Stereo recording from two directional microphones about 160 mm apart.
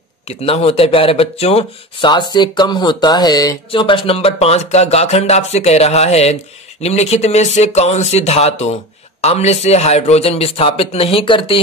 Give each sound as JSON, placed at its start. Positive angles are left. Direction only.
{"t": 0.3, "sound": "speech", "side_deg": 40}